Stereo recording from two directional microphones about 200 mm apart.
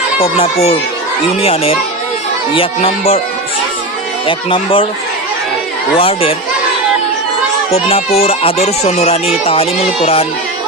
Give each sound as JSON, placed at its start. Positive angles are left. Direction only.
{"t": 0.2, "sound": "speech", "side_deg": 30}
{"t": 4.3, "sound": "speech", "side_deg": 25}
{"t": 6.0, "sound": "speech", "side_deg": 25}
{"t": 7.7, "sound": "speech", "side_deg": 30}